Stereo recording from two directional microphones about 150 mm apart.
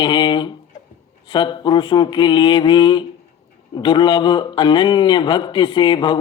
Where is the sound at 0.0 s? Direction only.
30° left (ahead or behind).